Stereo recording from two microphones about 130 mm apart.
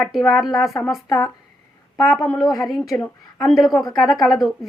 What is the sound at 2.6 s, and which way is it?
Speech, centre (ahead or behind).